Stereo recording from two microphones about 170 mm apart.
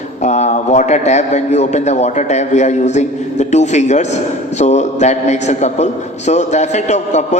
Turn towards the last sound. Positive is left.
turn(degrees=40)  # may be behind; listen again after turning